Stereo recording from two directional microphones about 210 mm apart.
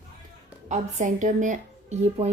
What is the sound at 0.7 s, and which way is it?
Speech, 35° right (ahead or behind).